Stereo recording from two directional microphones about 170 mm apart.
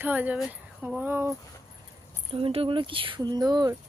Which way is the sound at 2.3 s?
35° right (ahead or behind).